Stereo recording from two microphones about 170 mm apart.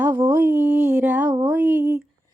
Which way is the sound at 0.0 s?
10° right (ahead or behind).